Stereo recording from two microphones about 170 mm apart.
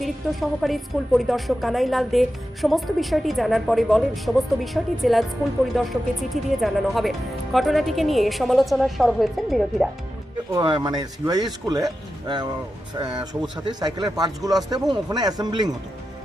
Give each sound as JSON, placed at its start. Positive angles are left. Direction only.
{"t": 0.0, "sound": "a woman's voice", "side_deg": 0}
{"t": 10.5, "sound": "speech", "side_deg": -25}
{"t": 13.0, "sound": "speech", "side_deg": -25}